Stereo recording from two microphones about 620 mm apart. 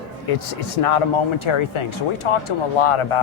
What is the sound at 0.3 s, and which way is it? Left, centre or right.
Speech, left.